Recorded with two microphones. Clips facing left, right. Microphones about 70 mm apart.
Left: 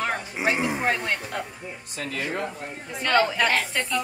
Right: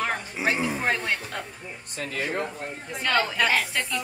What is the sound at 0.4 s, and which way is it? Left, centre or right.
Music, centre.